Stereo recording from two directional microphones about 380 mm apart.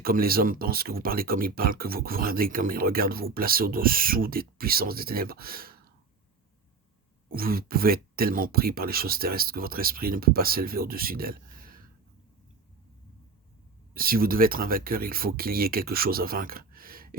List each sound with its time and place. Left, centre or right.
0.0 s speech: right
7.3 s speech: right
13.9 s speech: right